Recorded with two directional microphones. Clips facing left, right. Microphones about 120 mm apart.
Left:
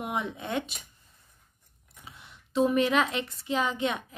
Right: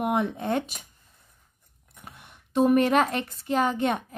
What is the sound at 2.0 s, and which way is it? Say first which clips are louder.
Speech: right 2 dB; 55° right (ahead or behind).